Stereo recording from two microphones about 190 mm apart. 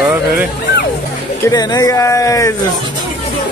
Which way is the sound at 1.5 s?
20° left (ahead or behind).